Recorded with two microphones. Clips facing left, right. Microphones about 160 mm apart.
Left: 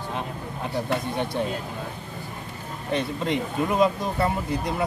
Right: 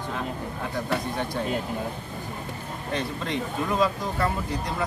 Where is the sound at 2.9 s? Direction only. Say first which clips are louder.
Left 4 dB; 20° left (ahead or behind).